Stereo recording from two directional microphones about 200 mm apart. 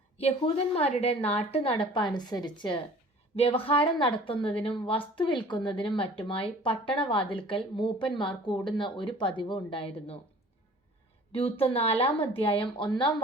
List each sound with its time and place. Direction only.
0.2 s speech: 30° left (ahead or behind)
11.3 s speech: 30° left (ahead or behind)